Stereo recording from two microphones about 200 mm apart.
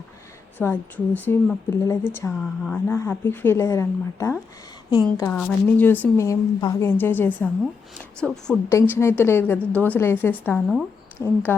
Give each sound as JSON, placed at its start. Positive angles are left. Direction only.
{"t": 0.6, "sound": "a woman's voice", "side_deg": 10}